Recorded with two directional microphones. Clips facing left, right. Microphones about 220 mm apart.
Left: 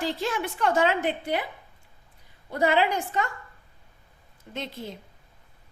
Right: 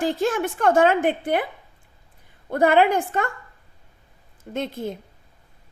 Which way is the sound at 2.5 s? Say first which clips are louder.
Right 6 dB; 55° right (ahead or behind).